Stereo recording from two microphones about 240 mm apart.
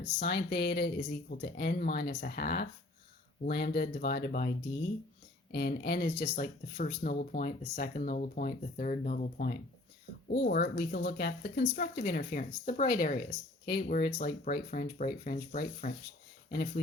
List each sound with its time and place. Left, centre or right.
0.2 s speech: left